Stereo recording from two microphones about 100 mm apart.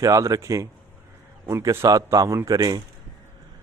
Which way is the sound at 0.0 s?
35° right (ahead or behind).